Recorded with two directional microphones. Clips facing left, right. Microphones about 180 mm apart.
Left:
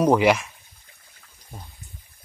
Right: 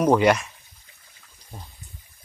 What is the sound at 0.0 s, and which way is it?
Speech, 5° left (ahead or behind).